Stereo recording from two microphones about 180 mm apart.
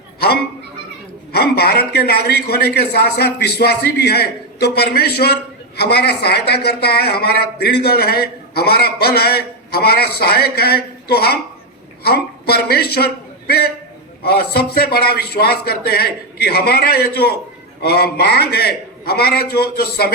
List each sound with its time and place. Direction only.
1.3 s a man's voice: 60° left (ahead or behind)
14.2 s a man's voice: 60° left (ahead or behind)